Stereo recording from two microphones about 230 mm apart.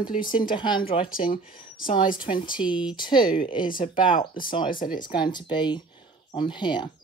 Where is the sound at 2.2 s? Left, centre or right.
Left.